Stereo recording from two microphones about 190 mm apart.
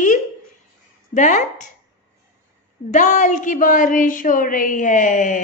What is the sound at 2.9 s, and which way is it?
Speech, 40° left (ahead or behind).